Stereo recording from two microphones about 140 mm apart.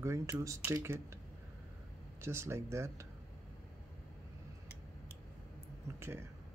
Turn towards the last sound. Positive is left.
turn(degrees=-20)  # may be behind; listen again after turning